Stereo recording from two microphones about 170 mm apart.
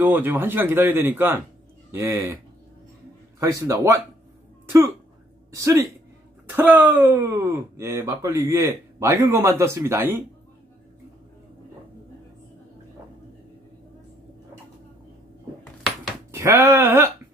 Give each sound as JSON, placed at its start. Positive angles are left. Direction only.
{"t": 0.0, "sound": "speech", "side_deg": -10}
{"t": 3.3, "sound": "speech", "side_deg": -20}
{"t": 16.3, "sound": "speech", "side_deg": -15}